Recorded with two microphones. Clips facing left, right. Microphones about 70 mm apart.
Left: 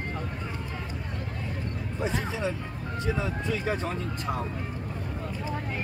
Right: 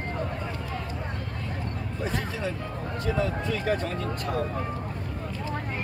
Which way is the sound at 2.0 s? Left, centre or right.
Centre.